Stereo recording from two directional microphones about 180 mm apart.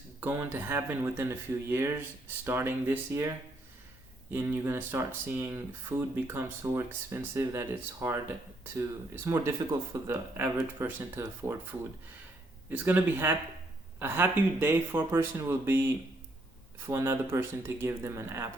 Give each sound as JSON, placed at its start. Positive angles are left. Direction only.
{"t": 0.2, "sound": "speech", "side_deg": -10}